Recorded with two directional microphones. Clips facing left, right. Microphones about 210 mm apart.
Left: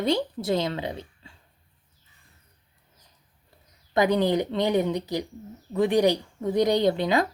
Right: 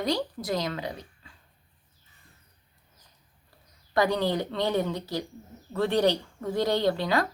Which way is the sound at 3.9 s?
20° left (ahead or behind).